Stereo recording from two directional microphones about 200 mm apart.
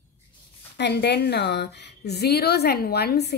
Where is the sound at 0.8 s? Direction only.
55° left (ahead or behind).